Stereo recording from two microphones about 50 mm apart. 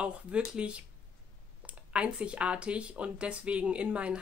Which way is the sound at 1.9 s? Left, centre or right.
Right.